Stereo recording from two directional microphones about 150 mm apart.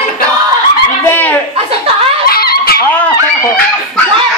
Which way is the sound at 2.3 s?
90° left.